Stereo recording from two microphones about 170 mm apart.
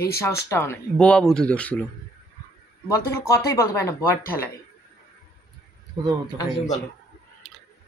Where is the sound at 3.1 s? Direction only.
15° left (ahead or behind).